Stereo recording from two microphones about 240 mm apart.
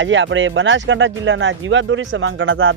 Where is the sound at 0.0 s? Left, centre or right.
Right.